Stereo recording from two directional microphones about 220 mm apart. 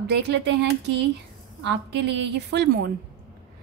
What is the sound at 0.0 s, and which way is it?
A woman's voice, 50° right (ahead or behind).